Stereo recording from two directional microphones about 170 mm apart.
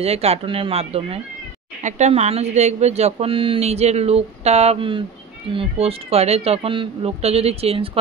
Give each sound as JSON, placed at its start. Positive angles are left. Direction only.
{"t": 0.0, "sound": "speech", "side_deg": -40}